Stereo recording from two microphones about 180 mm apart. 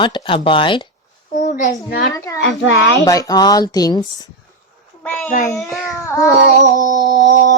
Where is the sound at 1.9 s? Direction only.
55° left (ahead or behind).